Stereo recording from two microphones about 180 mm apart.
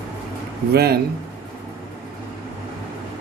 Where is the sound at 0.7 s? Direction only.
60° right (ahead or behind).